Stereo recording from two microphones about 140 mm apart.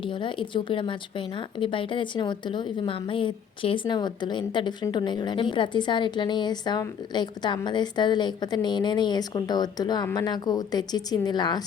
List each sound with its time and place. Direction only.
0.0 s a woman's voice: 35° left (ahead or behind)